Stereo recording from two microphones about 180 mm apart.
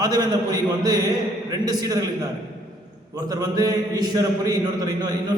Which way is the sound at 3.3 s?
20° right (ahead or behind).